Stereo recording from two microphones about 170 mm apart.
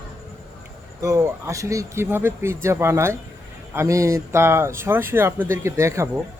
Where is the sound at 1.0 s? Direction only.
20° right (ahead or behind).